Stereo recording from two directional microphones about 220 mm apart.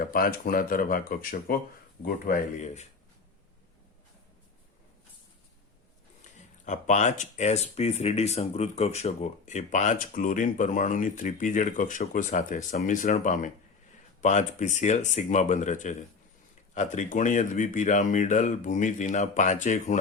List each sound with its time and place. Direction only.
0.0 s speech: 40° left (ahead or behind)
6.7 s speech: 30° left (ahead or behind)